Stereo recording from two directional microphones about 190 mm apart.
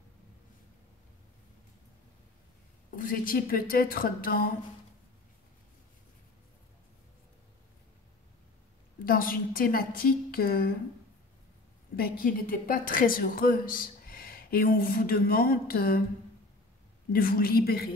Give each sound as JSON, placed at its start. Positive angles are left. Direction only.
{"t": 3.0, "sound": "a woman's voice", "side_deg": 45}
{"t": 9.0, "sound": "a woman's voice", "side_deg": 50}
{"t": 12.0, "sound": "a woman's voice", "side_deg": 45}
{"t": 17.1, "sound": "a woman's voice", "side_deg": 50}